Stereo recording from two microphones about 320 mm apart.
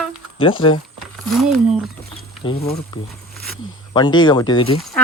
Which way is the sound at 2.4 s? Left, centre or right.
Centre.